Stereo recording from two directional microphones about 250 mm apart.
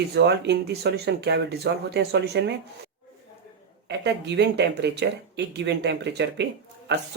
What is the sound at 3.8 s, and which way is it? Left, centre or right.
Speech, right.